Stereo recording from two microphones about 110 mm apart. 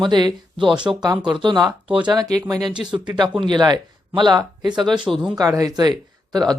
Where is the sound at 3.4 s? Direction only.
40° right (ahead or behind).